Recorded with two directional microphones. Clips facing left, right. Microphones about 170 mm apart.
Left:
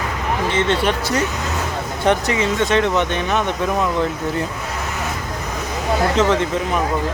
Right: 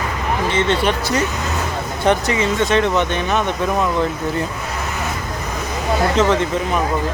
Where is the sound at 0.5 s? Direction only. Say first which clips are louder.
Right 1 dB; 20° right (ahead or behind).